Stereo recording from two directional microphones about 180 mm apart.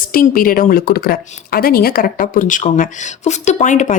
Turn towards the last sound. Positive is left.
turn(degrees=45)  # may be behind; listen again after turning